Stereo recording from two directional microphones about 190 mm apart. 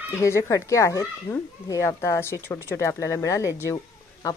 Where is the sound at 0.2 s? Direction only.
15° left (ahead or behind).